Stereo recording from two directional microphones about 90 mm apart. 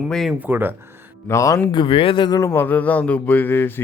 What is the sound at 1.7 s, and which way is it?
Speech, 80° left.